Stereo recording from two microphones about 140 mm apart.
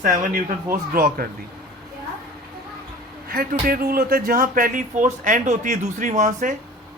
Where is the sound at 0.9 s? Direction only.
90° right.